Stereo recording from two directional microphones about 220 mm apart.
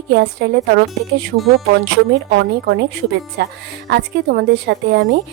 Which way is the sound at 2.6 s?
50° right (ahead or behind).